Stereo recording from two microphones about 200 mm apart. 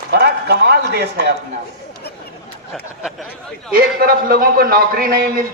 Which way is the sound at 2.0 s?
55° left (ahead or behind).